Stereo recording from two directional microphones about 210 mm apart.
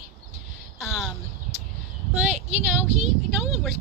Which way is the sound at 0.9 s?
Centre (ahead or behind).